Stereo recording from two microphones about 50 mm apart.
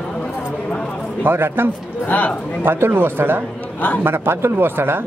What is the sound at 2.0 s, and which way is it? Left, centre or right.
Speech, left.